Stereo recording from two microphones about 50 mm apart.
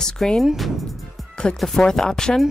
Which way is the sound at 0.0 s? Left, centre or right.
Centre.